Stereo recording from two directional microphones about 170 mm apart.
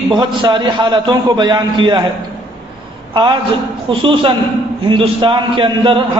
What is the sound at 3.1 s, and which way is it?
A man's voice, 30° right (ahead or behind).